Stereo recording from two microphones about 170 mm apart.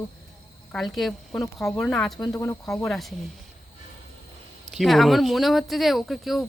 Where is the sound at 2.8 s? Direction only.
Centre (ahead or behind).